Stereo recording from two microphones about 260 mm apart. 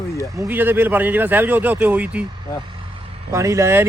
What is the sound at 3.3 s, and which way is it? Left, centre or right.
Speech, centre.